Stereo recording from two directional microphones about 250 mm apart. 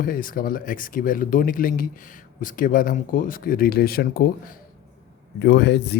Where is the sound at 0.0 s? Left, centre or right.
Left.